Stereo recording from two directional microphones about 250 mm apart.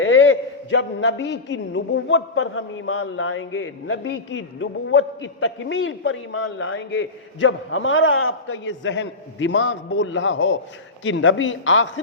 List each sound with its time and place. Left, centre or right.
0.0 s a man's voice: left